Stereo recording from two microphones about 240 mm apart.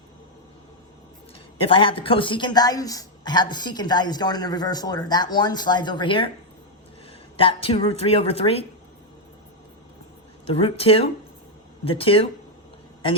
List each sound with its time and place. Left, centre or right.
1.6 s a man's voice: left
7.3 s a woman's voice: left
10.4 s a woman's voice: left